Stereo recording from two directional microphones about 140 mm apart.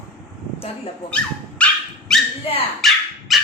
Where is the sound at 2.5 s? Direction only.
40° left (ahead or behind).